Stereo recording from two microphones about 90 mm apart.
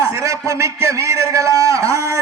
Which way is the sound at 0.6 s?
35° right (ahead or behind).